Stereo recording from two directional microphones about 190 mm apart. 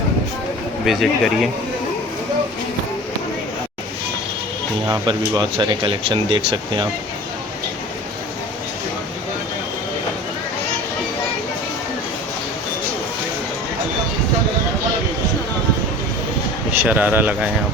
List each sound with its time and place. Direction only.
0.9 s speech: centre (ahead or behind)
4.9 s speech: 20° right (ahead or behind)
16.8 s speech: 10° right (ahead or behind)